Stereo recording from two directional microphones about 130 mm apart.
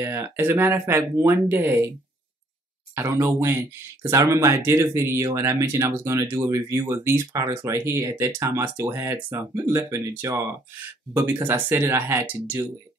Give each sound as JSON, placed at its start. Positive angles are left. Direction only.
{"t": 0.0, "sound": "speech", "side_deg": -20}
{"t": 2.9, "sound": "speech", "side_deg": -20}